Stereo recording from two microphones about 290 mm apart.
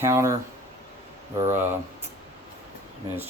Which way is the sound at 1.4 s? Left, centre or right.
Centre.